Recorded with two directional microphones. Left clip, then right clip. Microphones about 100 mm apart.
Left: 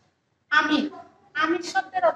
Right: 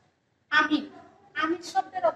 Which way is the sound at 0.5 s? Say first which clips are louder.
Left 3 dB; 30° left (ahead or behind).